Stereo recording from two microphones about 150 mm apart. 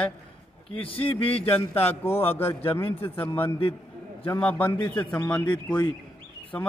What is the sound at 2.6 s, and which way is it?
Speech, 40° left (ahead or behind).